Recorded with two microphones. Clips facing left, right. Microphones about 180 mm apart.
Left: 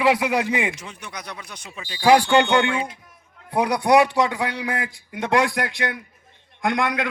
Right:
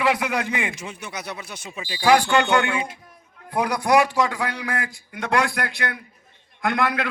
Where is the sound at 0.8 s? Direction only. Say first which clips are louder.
Right 3 dB; 10° right (ahead or behind).